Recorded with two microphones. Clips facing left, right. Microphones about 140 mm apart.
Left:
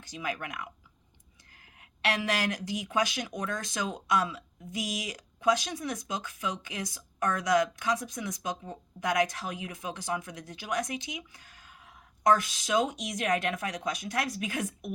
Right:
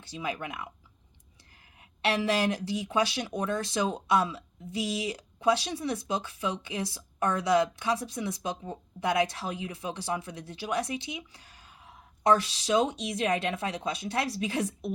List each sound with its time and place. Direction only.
0.0 s speech: 25° right (ahead or behind)
2.0 s speech: 25° right (ahead or behind)